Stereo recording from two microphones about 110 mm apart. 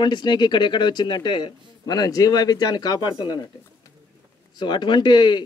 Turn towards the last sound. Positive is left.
turn(degrees=45)  # may be behind; listen again after turning